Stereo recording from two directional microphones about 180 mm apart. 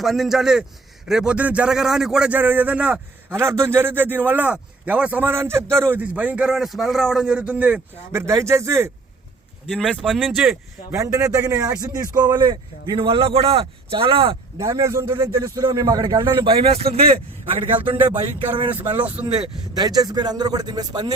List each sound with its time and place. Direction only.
0.0 s a man's voice: centre (ahead or behind)
9.6 s speech: centre (ahead or behind)
10.9 s a man's voice: 20° right (ahead or behind)
14.6 s a man's voice: 15° right (ahead or behind)
19.2 s a man's voice: 15° right (ahead or behind)